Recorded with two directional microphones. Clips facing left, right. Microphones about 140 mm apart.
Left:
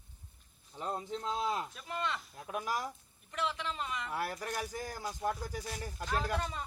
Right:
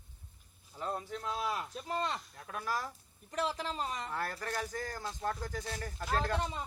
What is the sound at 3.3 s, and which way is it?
Speech, 40° right (ahead or behind).